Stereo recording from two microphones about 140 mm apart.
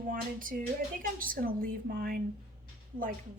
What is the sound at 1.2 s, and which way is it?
A woman's voice, 90° right.